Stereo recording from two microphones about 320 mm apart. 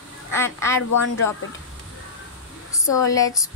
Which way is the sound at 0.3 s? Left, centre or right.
Centre.